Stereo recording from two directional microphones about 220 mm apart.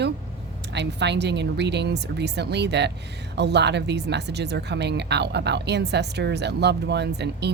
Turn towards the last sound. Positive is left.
turn(degrees=-50)  # may be behind; listen again after turning